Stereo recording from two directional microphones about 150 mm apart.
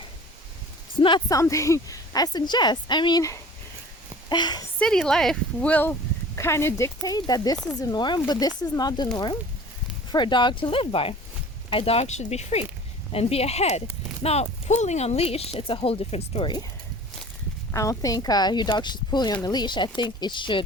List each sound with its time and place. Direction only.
0.9 s a sound: 35° left (ahead or behind)
1.3 s a woman's voice: 20° left (ahead or behind)
4.8 s a woman's voice: 5° left (ahead or behind); by 9.0 s 25° left (ahead or behind)
10.1 s speech: 30° left (ahead or behind)
17.7 s a woman's voice: 20° left (ahead or behind)